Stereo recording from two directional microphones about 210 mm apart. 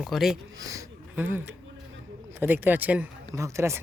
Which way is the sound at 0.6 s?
15° right (ahead or behind).